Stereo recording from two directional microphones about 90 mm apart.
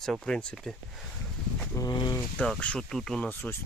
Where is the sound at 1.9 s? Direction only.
60° left (ahead or behind).